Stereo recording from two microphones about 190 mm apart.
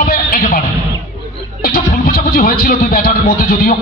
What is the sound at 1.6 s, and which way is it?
Speech, 50° left (ahead or behind).